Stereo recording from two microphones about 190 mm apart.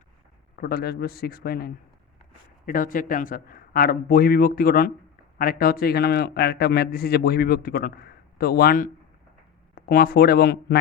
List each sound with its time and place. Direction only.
0.5 s a man's voice: 55° left (ahead or behind)